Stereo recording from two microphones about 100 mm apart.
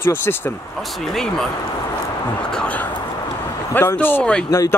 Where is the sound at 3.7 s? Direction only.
20° left (ahead or behind).